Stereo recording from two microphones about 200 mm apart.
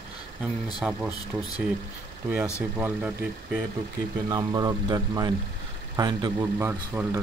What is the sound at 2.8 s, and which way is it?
Speech, 10° right (ahead or behind).